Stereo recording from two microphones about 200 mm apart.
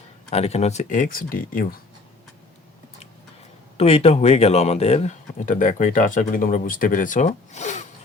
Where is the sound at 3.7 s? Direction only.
30° left (ahead or behind).